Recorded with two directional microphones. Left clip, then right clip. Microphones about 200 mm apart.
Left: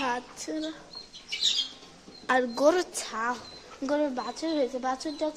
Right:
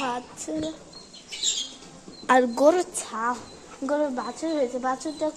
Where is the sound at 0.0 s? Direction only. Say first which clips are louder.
Right 1 dB; 15° left (ahead or behind).